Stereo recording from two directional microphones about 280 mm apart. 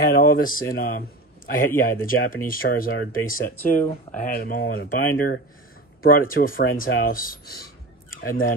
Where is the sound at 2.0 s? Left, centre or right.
Left.